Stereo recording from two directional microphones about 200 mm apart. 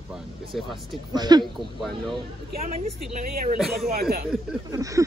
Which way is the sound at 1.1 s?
20° right (ahead or behind).